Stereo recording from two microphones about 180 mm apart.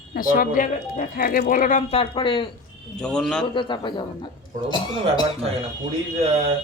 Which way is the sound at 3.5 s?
25° left (ahead or behind).